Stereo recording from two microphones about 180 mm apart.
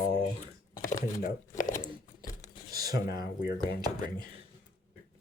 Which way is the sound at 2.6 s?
20° right (ahead or behind).